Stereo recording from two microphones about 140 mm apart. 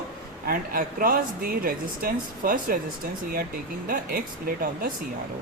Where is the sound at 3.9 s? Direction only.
90° right.